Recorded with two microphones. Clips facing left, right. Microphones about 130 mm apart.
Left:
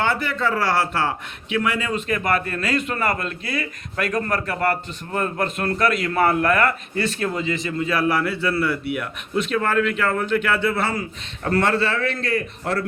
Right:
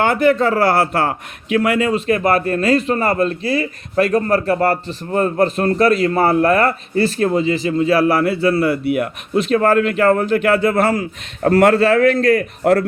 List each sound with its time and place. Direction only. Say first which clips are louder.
0.0 s a man's voice: right 8 dB; 45° right (ahead or behind)